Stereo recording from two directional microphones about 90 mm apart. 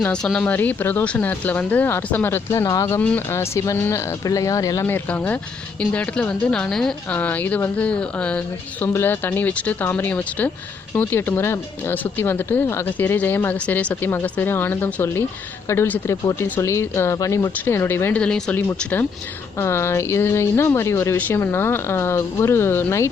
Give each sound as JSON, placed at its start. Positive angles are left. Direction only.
{"t": 0.0, "sound": "speech", "side_deg": 10}
{"t": 3.0, "sound": "speech", "side_deg": 15}
{"t": 3.3, "sound": "speech", "side_deg": 30}
{"t": 4.3, "sound": "speech", "side_deg": 40}
{"t": 4.9, "sound": "speech", "side_deg": 25}
{"t": 7.1, "sound": "speech", "side_deg": 20}
{"t": 8.9, "sound": "speech", "side_deg": 25}
{"t": 18.1, "sound": "speech", "side_deg": 10}
{"t": 18.8, "sound": "speech", "side_deg": 20}